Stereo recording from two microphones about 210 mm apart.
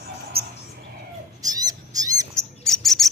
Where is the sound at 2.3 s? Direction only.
Centre (ahead or behind).